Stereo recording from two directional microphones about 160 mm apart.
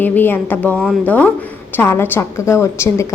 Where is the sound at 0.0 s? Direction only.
10° left (ahead or behind).